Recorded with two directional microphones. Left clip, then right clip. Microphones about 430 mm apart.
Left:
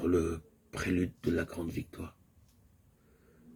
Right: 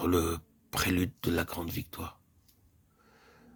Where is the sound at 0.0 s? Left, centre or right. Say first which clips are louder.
Right 1 dB; right.